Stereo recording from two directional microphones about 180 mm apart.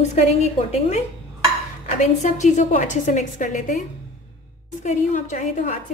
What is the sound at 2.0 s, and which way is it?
A woman's voice, 40° left (ahead or behind).